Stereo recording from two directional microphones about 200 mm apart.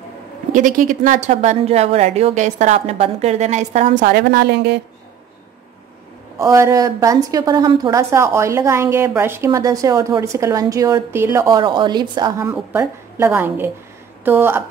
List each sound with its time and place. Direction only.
0.5 s a woman's voice: 40° right (ahead or behind); by 4.8 s 55° right (ahead or behind)
6.3 s a woman's voice: 15° right (ahead or behind)
12.4 s a woman's voice: 10° right (ahead or behind)